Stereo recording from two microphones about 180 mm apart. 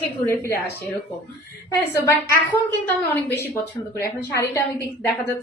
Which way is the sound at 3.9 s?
15° left (ahead or behind).